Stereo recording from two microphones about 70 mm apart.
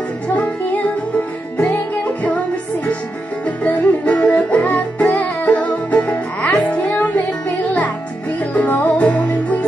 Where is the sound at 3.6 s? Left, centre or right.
Centre.